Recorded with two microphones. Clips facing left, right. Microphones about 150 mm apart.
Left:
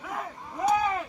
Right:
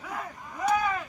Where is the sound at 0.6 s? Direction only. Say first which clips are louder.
Left 1 dB; 25° left (ahead or behind).